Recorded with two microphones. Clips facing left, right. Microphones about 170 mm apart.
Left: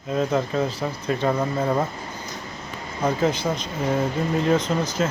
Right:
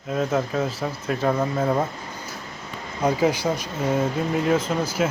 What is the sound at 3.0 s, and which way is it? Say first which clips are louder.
Speech: right 1 dB; 10° right (ahead or behind).